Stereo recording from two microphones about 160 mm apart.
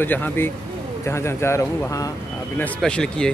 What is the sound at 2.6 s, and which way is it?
Speech, 5° left (ahead or behind).